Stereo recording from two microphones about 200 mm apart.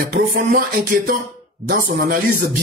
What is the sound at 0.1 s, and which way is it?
Speech, 45° right (ahead or behind).